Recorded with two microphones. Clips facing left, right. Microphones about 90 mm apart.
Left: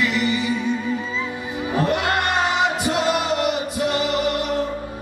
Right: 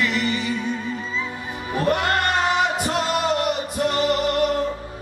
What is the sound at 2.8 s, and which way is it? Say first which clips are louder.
Music: left 1 dB; 45° right (ahead or behind).